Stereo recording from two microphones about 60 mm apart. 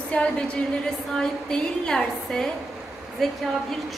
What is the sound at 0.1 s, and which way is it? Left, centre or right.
A woman's voice, centre.